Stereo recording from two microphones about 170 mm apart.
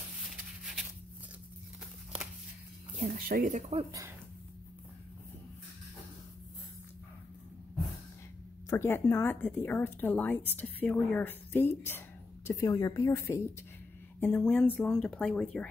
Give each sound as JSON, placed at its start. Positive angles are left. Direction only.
{"t": 0.3, "sound": "a sound", "side_deg": 0}
{"t": 3.0, "sound": "speech", "side_deg": -55}
{"t": 8.6, "sound": "a woman's voice", "side_deg": 15}